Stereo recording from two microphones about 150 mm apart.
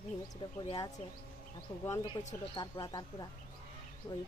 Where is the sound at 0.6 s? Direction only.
35° left (ahead or behind).